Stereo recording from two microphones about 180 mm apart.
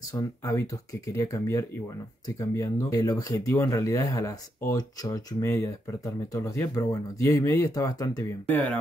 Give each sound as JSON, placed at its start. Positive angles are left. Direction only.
{"t": 0.1, "sound": "speech", "side_deg": 15}